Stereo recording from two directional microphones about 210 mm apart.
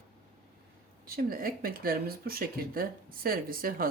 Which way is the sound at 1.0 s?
45° right (ahead or behind).